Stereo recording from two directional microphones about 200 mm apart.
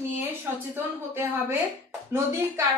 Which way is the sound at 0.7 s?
10° right (ahead or behind).